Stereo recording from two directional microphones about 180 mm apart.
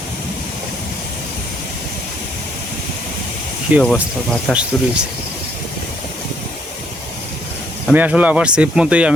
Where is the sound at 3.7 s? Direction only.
10° right (ahead or behind).